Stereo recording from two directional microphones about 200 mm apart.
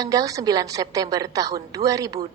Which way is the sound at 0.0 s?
15° right (ahead or behind).